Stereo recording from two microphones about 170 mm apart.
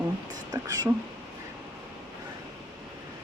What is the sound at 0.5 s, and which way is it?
Speech, 20° right (ahead or behind).